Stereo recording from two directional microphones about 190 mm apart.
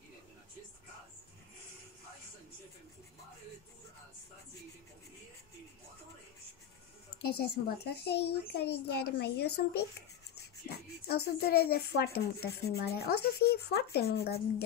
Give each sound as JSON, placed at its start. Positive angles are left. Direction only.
{"t": 7.2, "sound": "speech", "side_deg": 55}